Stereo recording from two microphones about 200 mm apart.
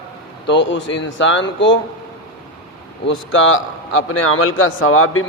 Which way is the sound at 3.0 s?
75° left (ahead or behind).